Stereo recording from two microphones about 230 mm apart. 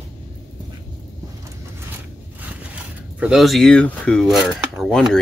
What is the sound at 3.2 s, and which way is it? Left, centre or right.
Speech, centre.